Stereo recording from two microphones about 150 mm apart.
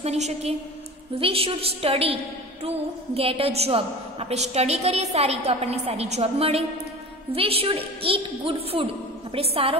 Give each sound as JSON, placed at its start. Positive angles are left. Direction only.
{"t": 0.0, "sound": "a woman's voice", "side_deg": -45}
{"t": 3.2, "sound": "a woman's voice", "side_deg": -40}